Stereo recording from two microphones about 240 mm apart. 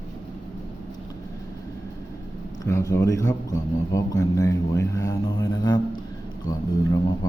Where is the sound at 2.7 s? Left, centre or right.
Centre.